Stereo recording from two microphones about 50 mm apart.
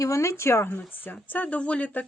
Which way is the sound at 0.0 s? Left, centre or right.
Left.